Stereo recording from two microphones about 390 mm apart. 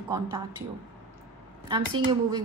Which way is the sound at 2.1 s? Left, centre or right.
Centre.